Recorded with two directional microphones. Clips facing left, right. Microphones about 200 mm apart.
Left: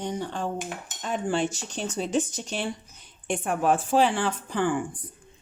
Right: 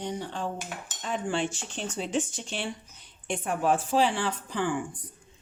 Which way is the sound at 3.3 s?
55° left (ahead or behind).